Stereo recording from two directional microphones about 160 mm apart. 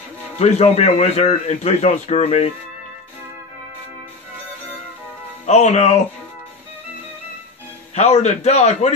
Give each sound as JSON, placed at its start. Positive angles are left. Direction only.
{"t": 0.4, "sound": "a man's voice", "side_deg": 40}
{"t": 5.5, "sound": "a man's voice", "side_deg": 45}
{"t": 7.9, "sound": "a man's voice", "side_deg": 45}